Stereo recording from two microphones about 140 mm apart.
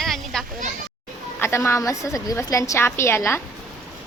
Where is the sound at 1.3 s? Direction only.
15° left (ahead or behind).